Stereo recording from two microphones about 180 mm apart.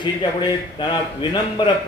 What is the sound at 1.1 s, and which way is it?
Speech, 25° left (ahead or behind).